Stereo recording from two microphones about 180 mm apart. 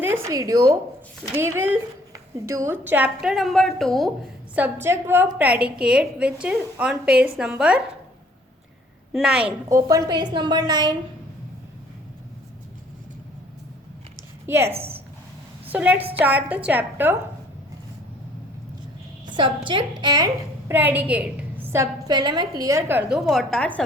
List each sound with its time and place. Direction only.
0.0 s a woman's voice: 15° right (ahead or behind); by 4.1 s centre (ahead or behind)
4.5 s a woman's voice: 10° right (ahead or behind)
9.1 s a woman's voice: 5° right (ahead or behind)
9.6 s a woman's voice: 20° right (ahead or behind)
14.4 s a woman's voice: 15° right (ahead or behind)
15.7 s a woman's voice: 10° right (ahead or behind)
20.0 s a woman's voice: 20° right (ahead or behind); by 23.8 s 5° left (ahead or behind)